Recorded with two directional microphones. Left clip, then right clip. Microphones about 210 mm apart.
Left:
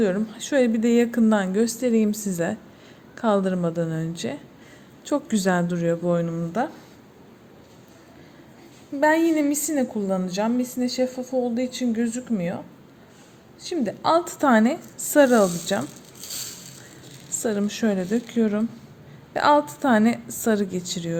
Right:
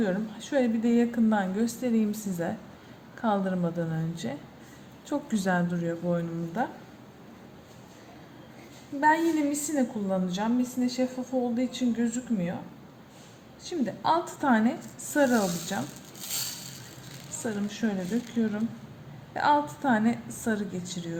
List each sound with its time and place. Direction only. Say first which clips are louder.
0.0 s a woman's voice: left 7 dB; 50° left (ahead or behind)
9.0 s a woman's voice: left 4 dB; 50° left (ahead or behind)
13.6 s a woman's voice: left 5 dB; 50° left (ahead or behind)
17.4 s a woman's voice: left 8 dB; 50° left (ahead or behind)